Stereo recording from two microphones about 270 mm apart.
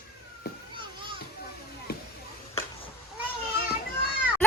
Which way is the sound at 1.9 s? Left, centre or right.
Left.